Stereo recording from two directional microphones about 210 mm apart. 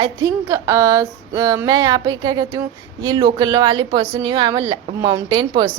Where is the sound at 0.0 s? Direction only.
15° right (ahead or behind).